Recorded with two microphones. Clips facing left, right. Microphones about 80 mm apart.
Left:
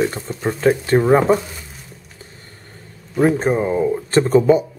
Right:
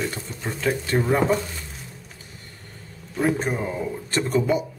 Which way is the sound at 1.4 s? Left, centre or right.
Centre.